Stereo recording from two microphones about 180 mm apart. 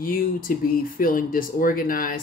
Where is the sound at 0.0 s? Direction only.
50° left (ahead or behind).